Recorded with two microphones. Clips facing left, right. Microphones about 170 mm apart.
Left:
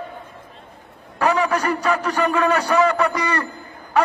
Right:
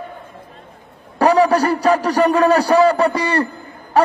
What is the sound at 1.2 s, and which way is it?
A man's voice, 35° right (ahead or behind).